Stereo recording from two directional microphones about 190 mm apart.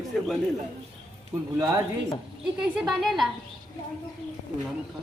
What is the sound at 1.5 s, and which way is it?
Speech, 20° right (ahead or behind).